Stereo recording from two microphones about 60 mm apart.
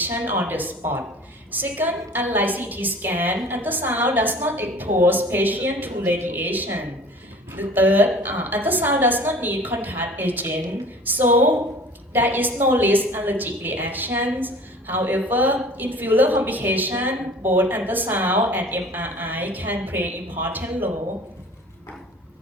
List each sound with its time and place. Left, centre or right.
0.0 s a woman's voice: right